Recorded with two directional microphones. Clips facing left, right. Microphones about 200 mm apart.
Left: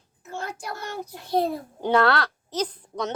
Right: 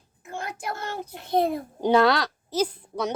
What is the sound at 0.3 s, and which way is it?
A child's voice, 15° right (ahead or behind).